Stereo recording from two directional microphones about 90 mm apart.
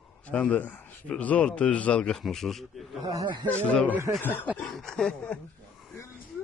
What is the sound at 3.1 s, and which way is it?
Speech, 45° right (ahead or behind).